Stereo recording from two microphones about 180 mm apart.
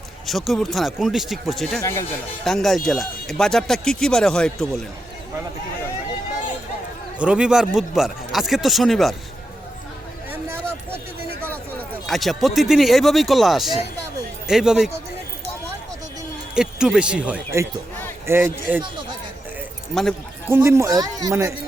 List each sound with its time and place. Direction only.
0.3 s speech: centre (ahead or behind)
1.8 s speech: 15° left (ahead or behind)
2.4 s speech: 5° left (ahead or behind)
7.2 s speech: 5° right (ahead or behind)
12.0 s speech: centre (ahead or behind)
16.6 s speech: 5° right (ahead or behind)
19.9 s speech: centre (ahead or behind)
20.5 s speech: 15° right (ahead or behind)